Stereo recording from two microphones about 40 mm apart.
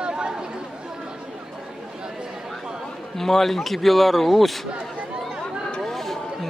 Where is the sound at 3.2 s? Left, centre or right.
Centre.